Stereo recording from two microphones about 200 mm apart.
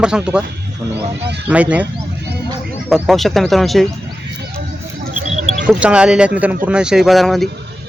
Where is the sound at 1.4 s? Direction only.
5° right (ahead or behind).